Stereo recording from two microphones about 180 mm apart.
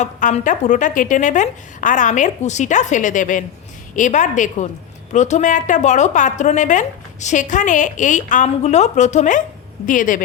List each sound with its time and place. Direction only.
0.0 s a woman's voice: 40° left (ahead or behind)